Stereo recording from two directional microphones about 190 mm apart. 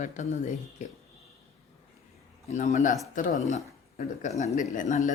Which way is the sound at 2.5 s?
40° left (ahead or behind).